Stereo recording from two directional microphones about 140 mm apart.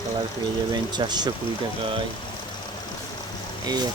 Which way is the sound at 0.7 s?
30° right (ahead or behind).